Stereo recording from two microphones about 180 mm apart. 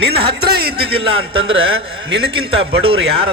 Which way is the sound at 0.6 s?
60° right (ahead or behind).